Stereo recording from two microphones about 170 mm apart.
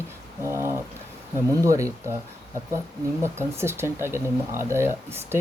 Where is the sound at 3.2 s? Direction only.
15° right (ahead or behind).